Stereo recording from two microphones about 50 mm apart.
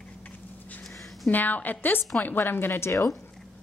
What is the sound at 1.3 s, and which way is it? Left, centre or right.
A woman's voice, left.